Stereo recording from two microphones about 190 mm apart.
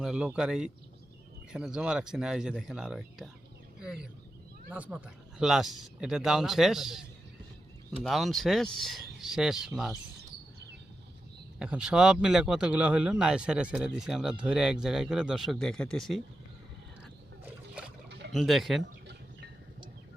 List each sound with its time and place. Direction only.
0.0 s speech: 5° right (ahead or behind)
8.0 s speech: centre (ahead or behind)
11.6 s speech: 5° right (ahead or behind)
18.3 s speech: centre (ahead or behind)
18.8 s chicken: 65° right (ahead or behind)